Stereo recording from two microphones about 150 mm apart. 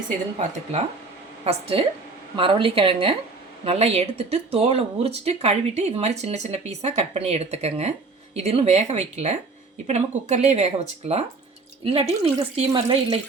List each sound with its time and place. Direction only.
1.5 s speech: 40° right (ahead or behind)